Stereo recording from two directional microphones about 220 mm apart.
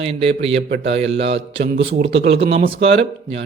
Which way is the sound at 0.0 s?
25° right (ahead or behind).